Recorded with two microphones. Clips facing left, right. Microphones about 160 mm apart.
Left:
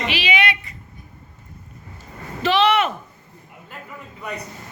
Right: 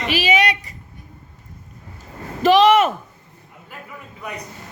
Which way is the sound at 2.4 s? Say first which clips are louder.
Right 5 dB; 45° right (ahead or behind).